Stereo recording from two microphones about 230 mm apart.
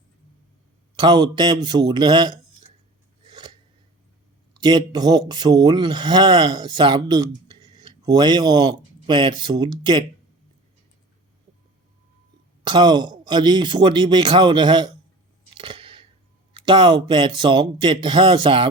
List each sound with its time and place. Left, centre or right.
0.9 s speech: centre
3.2 s scissors: centre
4.5 s speech: centre
12.6 s speech: centre
15.4 s scissors: right
16.6 s speech: right